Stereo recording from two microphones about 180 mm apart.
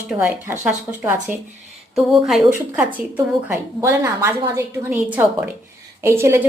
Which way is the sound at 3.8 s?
15° right (ahead or behind).